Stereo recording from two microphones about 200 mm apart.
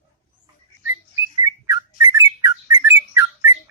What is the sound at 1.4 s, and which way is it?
Bird, 15° right (ahead or behind).